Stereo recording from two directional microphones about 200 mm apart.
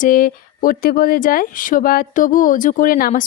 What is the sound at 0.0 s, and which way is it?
Speech, 45° left (ahead or behind).